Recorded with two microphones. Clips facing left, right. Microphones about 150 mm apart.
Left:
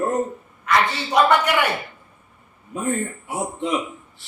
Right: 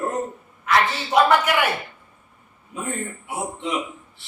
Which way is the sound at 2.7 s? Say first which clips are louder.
Left 5 dB; 40° left (ahead or behind).